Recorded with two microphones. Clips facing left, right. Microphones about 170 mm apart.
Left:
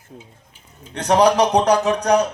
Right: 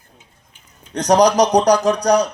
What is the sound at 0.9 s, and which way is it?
Speech, 40° right (ahead or behind).